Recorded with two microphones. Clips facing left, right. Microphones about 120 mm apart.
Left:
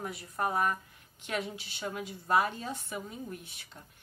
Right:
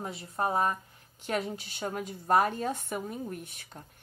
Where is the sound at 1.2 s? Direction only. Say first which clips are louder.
Right 4 dB; 40° right (ahead or behind).